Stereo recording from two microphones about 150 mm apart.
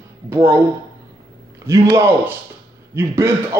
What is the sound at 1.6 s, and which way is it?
Speech, 20° right (ahead or behind).